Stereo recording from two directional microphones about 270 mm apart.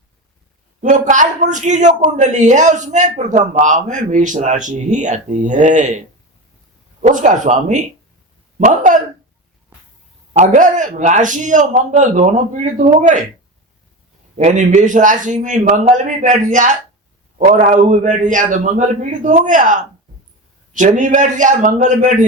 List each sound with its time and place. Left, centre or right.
0.8 s a man's voice: right
7.0 s a man's voice: right
10.3 s a man's voice: right
14.3 s a man's voice: right